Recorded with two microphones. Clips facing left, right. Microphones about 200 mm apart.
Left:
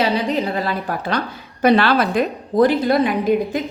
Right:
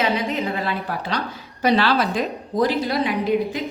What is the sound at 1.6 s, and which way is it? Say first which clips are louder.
A woman's voice: left 4 dB; 55° left (ahead or behind).